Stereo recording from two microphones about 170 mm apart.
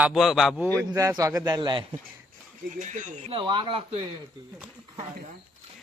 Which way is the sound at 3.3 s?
30° right (ahead or behind).